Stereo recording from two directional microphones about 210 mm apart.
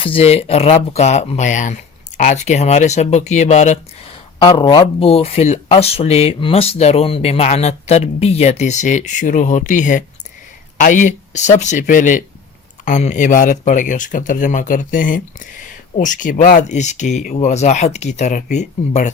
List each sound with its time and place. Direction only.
0.0 s speech: 25° left (ahead or behind)
4.4 s speech: 20° left (ahead or behind)